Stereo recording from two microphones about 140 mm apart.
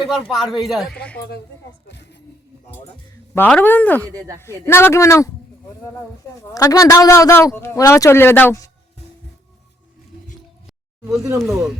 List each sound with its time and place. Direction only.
0.3 s speech: centre (ahead or behind)
0.9 s speech: 10° left (ahead or behind)
3.3 s speech: 15° left (ahead or behind)
4.1 s speech: 25° right (ahead or behind)
4.6 s speech: 20° left (ahead or behind)
6.5 s speech: 25° left (ahead or behind)
11.3 s speech: centre (ahead or behind)